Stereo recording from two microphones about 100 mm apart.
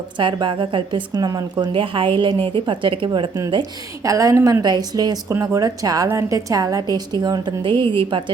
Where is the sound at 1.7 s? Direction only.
60° right (ahead or behind).